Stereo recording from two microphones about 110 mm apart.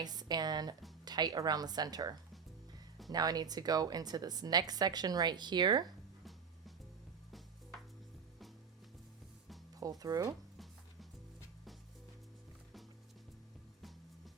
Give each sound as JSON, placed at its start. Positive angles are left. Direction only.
{"t": 0.0, "sound": "a woman's voice", "side_deg": -40}
{"t": 9.8, "sound": "a woman's voice", "side_deg": -35}